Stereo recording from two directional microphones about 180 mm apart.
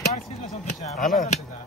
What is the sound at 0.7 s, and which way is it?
Speech, 40° left (ahead or behind).